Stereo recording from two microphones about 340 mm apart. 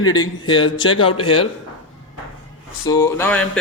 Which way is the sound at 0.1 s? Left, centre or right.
Centre.